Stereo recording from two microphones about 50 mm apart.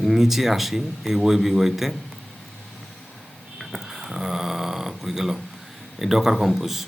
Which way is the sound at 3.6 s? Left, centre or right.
Centre.